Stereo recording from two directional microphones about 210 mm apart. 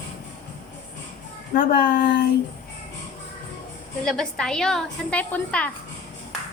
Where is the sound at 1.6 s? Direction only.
45° left (ahead or behind).